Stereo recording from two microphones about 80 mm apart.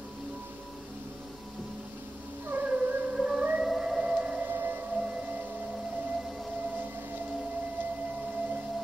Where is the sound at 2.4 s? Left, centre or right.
Right.